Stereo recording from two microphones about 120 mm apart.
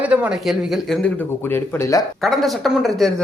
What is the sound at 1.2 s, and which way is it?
Speech, 15° left (ahead or behind).